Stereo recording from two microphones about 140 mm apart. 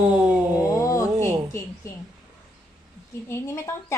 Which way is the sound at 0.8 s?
20° left (ahead or behind).